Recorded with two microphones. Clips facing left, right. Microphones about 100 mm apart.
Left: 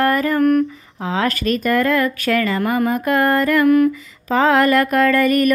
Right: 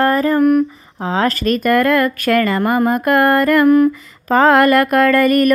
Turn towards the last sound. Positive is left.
turn(degrees=-45)  # may be behind; listen again after turning